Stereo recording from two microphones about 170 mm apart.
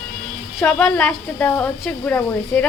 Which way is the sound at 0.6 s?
10° left (ahead or behind).